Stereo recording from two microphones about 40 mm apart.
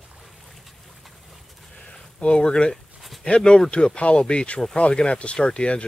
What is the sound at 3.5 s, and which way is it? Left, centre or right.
Speech, left.